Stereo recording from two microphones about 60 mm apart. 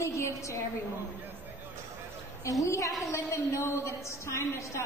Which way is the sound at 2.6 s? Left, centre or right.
Left.